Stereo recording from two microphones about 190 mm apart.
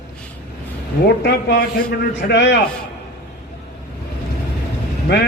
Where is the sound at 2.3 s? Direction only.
75° left (ahead or behind).